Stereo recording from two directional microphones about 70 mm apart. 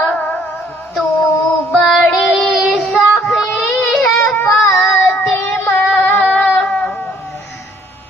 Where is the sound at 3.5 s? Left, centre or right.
Centre.